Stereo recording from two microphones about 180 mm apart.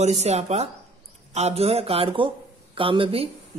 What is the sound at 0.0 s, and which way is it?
Speech, 40° right (ahead or behind).